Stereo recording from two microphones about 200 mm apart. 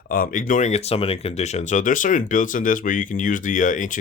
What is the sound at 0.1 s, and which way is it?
Speech, 45° left (ahead or behind).